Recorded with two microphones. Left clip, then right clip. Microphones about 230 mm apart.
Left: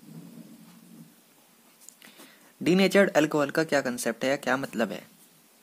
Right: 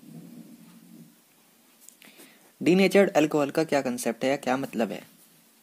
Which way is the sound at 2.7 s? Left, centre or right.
Centre.